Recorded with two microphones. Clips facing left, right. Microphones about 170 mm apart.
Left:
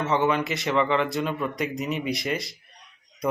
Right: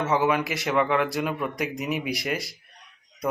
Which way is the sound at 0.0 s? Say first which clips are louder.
Even; 10° right (ahead or behind).